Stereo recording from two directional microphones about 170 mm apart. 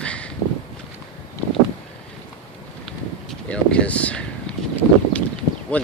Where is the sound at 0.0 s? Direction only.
5° left (ahead or behind).